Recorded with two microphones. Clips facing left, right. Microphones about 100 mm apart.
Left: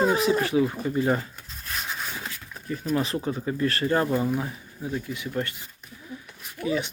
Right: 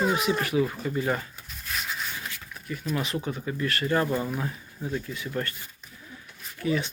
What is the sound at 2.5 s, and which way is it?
Speech, 35° left (ahead or behind).